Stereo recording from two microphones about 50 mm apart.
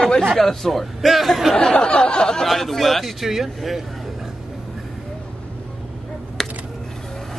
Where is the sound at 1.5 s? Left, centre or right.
Centre.